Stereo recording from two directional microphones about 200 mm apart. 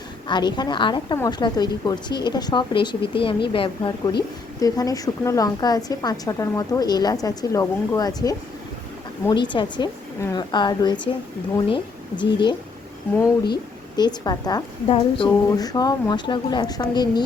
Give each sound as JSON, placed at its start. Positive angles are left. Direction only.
{"t": 0.3, "sound": "a woman's voice", "side_deg": 20}
{"t": 13.9, "sound": "a woman's voice", "side_deg": 20}